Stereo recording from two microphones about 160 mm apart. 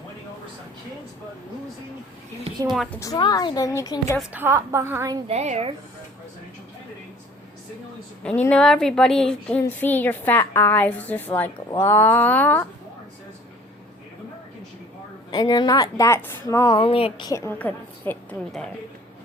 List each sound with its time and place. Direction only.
2.7 s a woman's voice: centre (ahead or behind)
3.0 s speech: 25° left (ahead or behind)
4.3 s a woman's voice: 15° right (ahead or behind)
5.3 s speech: 40° right (ahead or behind)
8.2 s a woman's voice: 5° left (ahead or behind)
15.3 s speech: 25° left (ahead or behind)
16.7 s a woman's voice: 35° left (ahead or behind)
17.3 s a woman's voice: 15° left (ahead or behind)